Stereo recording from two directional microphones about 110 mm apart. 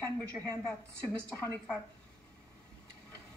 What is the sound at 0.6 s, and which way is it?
Speech, 5° left (ahead or behind).